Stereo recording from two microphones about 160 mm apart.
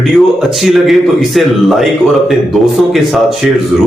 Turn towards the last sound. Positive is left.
turn(degrees=-5)  # may be behind; listen again after turning